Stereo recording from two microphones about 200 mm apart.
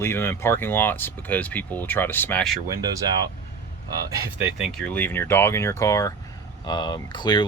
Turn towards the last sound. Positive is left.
turn(degrees=20)  # may be behind; listen again after turning